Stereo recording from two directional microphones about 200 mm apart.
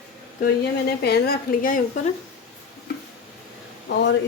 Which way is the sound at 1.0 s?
50° left (ahead or behind).